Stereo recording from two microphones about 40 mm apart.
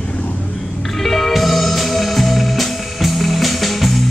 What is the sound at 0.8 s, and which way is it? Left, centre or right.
Music, centre.